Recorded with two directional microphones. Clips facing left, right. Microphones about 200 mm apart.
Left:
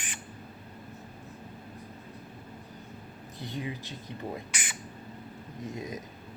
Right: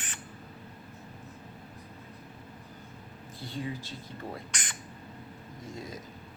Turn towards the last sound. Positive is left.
turn(degrees=20)  # may be behind; listen again after turning